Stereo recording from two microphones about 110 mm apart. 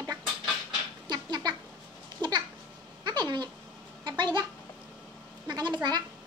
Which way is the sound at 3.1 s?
40° right (ahead or behind).